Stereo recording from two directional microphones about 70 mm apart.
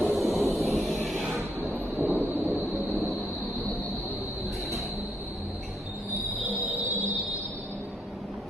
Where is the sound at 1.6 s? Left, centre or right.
Right.